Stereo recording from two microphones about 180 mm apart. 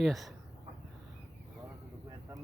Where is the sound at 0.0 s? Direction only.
Centre (ahead or behind).